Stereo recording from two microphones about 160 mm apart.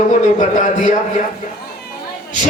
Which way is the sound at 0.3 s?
50° left (ahead or behind).